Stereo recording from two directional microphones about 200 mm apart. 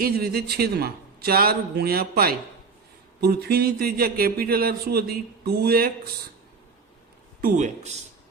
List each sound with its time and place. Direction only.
0.0 s speech: 50° right (ahead or behind)
7.4 s speech: 40° right (ahead or behind)